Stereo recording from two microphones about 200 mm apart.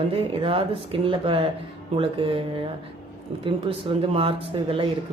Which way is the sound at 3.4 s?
25° right (ahead or behind).